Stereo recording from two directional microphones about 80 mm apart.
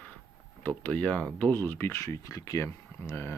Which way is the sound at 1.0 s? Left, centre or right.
Centre.